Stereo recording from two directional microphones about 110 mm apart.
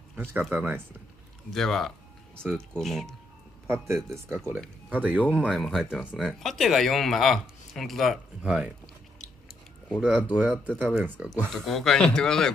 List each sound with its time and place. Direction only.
0.1 s speech: 20° right (ahead or behind)
1.5 s speech: centre (ahead or behind)
3.6 s a man's voice: 20° right (ahead or behind); by 8.2 s centre (ahead or behind)
8.4 s speech: 10° right (ahead or behind)
10.0 s speech: 15° right (ahead or behind)
11.5 s speech: centre (ahead or behind)